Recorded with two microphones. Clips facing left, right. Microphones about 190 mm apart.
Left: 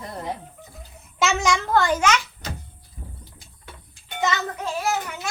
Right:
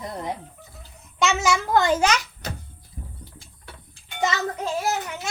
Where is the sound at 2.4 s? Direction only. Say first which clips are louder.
Right 1 dB; 60° right (ahead or behind).